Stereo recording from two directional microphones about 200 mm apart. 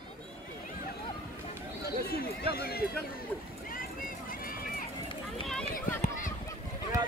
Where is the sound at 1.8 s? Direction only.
50° left (ahead or behind).